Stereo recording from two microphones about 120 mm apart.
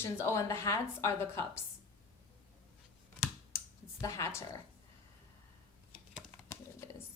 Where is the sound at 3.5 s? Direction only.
25° left (ahead or behind).